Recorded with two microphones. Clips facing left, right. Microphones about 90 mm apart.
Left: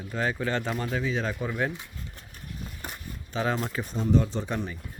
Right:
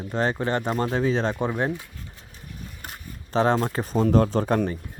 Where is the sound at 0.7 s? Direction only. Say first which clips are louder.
Right 6 dB; 40° right (ahead or behind).